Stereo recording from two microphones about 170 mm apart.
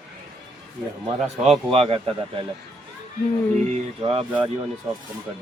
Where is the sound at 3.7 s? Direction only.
35° right (ahead or behind).